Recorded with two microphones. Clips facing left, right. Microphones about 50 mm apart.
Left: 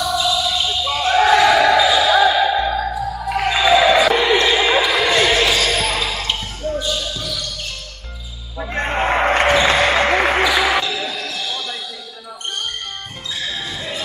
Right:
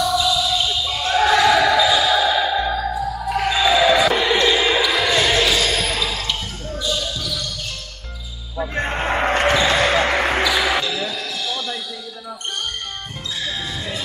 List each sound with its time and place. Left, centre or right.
0.0 s a sound: centre
0.9 s basketball bounce: centre
6.1 s a sound: left
6.8 s basketball bounce: left
8.5 s basketball bounce: centre
13.4 s basketball bounce: centre